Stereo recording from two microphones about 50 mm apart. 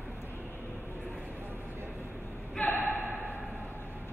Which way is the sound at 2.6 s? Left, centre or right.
Left.